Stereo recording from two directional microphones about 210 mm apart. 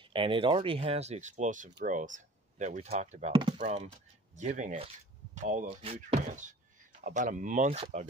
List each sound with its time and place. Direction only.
0.0 s speech: 25° right (ahead or behind)
3.5 s speech: 35° right (ahead or behind)